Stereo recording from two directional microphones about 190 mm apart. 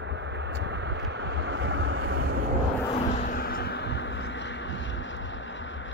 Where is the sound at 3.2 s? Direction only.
50° left (ahead or behind).